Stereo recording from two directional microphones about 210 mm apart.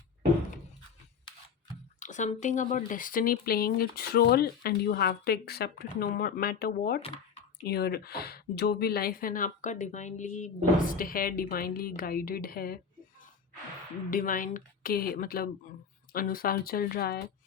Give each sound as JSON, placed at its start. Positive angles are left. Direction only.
{"t": 2.0, "sound": "a woman's voice", "side_deg": 35}
{"t": 14.1, "sound": "a woman's voice", "side_deg": 40}